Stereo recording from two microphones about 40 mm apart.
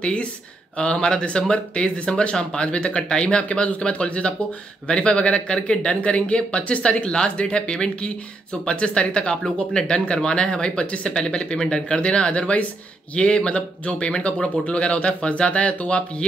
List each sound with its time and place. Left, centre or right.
0.0 s speech: left